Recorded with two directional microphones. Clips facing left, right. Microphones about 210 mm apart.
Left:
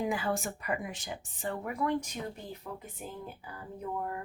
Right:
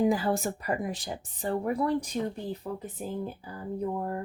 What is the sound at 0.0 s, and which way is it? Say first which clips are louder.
Speech: right 6 dB; 35° right (ahead or behind).